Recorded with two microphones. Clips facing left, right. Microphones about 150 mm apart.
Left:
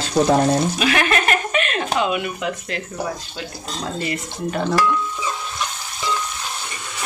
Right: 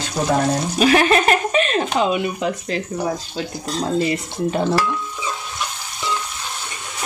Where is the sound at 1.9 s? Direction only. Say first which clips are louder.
Right 2 dB; 30° right (ahead or behind).